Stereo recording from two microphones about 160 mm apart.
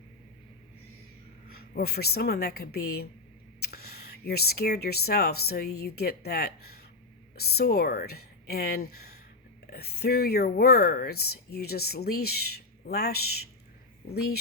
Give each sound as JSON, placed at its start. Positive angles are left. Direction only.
{"t": 1.5, "sound": "speech", "side_deg": 75}